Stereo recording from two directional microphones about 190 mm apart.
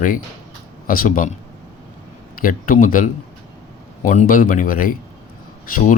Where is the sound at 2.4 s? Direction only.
45° left (ahead or behind).